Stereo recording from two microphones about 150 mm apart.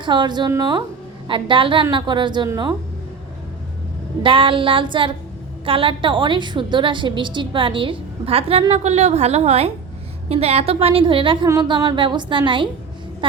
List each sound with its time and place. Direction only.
0.0 s a woman's voice: 30° right (ahead or behind)
4.2 s a woman's voice: 35° right (ahead or behind)